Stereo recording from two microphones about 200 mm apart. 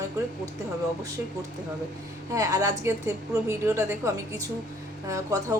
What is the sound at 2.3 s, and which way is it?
Speech, 15° right (ahead or behind).